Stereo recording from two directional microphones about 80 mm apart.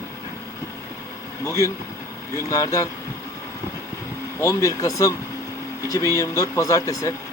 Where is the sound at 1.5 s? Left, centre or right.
Left.